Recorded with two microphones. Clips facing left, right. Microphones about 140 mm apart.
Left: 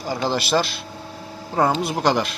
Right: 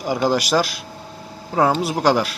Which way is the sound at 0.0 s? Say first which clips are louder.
Right 4 dB; 15° right (ahead or behind).